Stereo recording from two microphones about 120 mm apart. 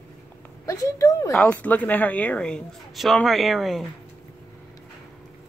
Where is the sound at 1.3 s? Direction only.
10° left (ahead or behind).